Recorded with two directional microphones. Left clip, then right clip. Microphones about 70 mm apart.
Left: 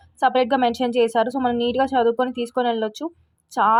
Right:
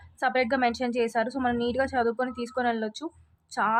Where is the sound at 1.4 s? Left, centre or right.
Left.